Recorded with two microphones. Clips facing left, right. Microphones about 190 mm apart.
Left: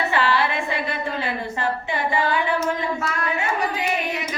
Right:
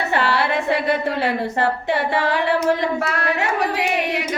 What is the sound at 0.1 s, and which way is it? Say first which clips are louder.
A woman's voice: right 2 dB; 65° right (ahead or behind).